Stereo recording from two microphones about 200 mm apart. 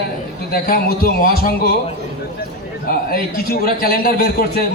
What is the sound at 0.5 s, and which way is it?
A man's voice, 45° left (ahead or behind).